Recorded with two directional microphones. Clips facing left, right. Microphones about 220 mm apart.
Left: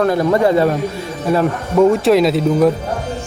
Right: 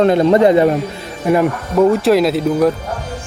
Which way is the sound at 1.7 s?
Centre (ahead or behind).